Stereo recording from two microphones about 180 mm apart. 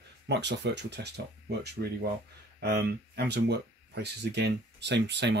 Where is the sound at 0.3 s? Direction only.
70° right (ahead or behind).